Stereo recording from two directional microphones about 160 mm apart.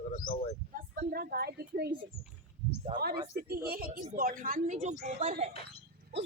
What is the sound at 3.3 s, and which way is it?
A woman's voice, 70° right (ahead or behind).